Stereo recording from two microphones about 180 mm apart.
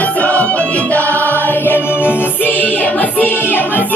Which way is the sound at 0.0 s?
10° left (ahead or behind).